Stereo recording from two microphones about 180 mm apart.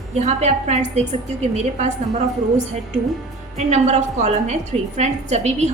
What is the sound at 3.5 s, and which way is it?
A woman's voice, 40° right (ahead or behind).